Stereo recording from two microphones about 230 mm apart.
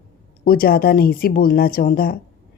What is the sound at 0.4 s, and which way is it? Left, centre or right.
Speech, left.